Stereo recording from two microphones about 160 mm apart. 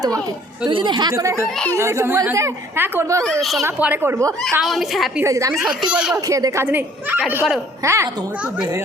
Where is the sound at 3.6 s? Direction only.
10° right (ahead or behind).